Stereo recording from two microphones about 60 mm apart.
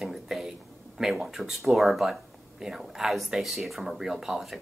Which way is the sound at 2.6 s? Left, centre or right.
Centre.